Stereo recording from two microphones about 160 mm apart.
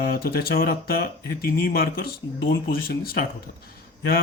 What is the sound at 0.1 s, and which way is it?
Speech, 70° left (ahead or behind).